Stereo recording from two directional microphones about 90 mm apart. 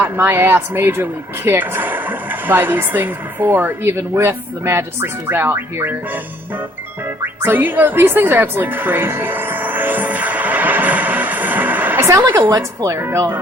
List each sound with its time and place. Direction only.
0.0 s speech: 20° right (ahead or behind)
7.4 s music: 20° right (ahead or behind)
12.0 s speech: 25° right (ahead or behind)
12.5 s speech: 40° right (ahead or behind)
13.0 s speech: 25° right (ahead or behind)